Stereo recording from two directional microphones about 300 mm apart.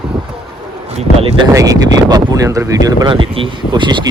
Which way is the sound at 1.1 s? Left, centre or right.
Centre.